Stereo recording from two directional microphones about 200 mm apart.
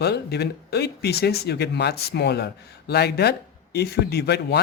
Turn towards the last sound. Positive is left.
turn(degrees=55)  # may be behind; listen again after turning